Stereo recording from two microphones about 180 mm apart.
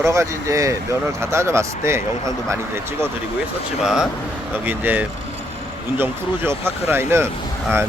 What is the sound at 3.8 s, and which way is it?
Speech, 5° right (ahead or behind).